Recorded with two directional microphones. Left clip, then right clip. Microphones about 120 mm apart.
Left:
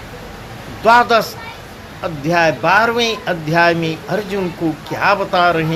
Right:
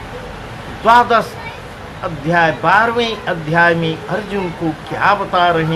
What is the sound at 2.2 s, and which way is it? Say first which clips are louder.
Speech: right 1 dB; 50° left (ahead or behind).